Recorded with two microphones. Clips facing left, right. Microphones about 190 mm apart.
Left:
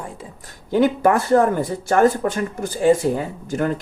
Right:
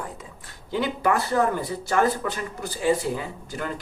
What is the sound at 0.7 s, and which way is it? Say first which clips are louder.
Speech: left 7 dB; 50° left (ahead or behind).